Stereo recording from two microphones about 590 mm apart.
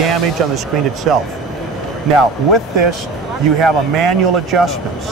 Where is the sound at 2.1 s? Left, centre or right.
Right.